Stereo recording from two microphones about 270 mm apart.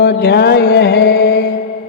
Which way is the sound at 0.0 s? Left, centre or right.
Left.